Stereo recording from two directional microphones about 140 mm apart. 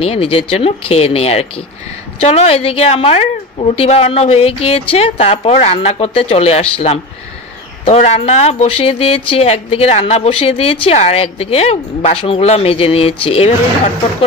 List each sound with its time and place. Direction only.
0.0 s speech: 45° left (ahead or behind)